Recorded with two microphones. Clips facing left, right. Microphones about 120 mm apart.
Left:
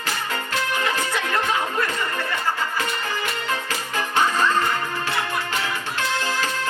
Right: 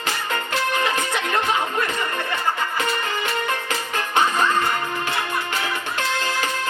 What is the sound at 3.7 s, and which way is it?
Music, 20° right (ahead or behind).